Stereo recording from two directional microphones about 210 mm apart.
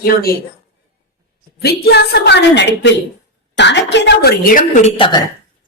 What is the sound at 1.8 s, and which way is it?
A woman's voice, 50° left (ahead or behind).